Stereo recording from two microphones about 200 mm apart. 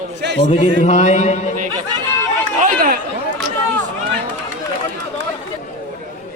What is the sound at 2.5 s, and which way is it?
Chatter, 45° right (ahead or behind).